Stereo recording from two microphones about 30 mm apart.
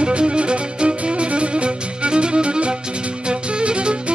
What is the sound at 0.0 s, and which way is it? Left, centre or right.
Music, right.